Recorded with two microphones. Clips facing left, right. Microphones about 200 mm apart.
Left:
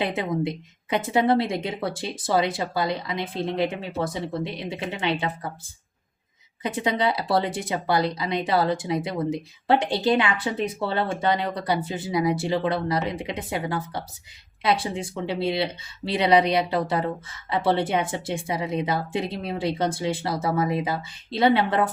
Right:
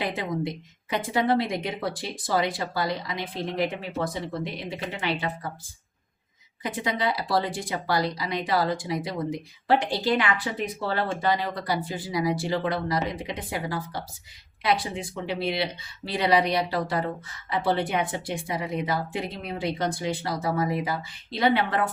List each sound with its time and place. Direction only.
0.0 s speech: 20° left (ahead or behind)
6.6 s speech: 25° left (ahead or behind)